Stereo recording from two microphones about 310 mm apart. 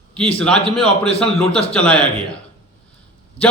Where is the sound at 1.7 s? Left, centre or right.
Centre.